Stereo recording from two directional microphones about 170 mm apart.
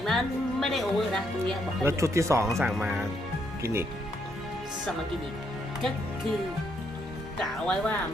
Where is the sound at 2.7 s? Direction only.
5° right (ahead or behind).